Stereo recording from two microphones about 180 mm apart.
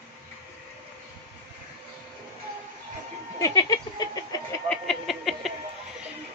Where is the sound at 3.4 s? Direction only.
20° left (ahead or behind).